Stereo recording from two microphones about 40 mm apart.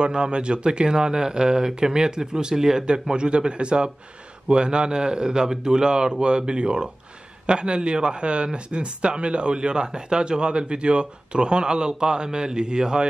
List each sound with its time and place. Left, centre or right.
0.0 s speech: right